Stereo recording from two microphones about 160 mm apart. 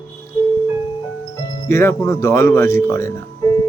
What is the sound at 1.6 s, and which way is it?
Speech, 15° left (ahead or behind).